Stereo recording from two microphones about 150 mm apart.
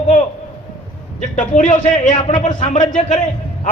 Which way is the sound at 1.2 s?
55° left (ahead or behind).